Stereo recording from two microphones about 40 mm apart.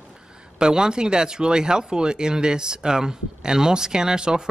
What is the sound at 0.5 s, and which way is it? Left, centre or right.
Speech, centre.